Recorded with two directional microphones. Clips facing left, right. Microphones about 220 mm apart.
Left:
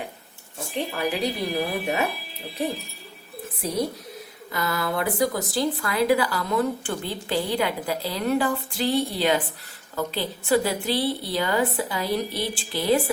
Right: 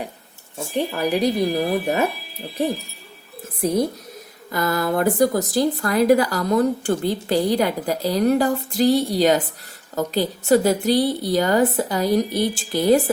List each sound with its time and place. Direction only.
0.9 s a woman's voice: 40° right (ahead or behind)
4.5 s a woman's voice: 45° right (ahead or behind)